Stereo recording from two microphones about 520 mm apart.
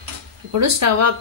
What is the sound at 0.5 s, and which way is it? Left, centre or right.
Speech, right.